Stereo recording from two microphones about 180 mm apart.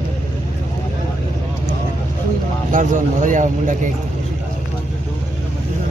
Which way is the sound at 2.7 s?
45° right (ahead or behind).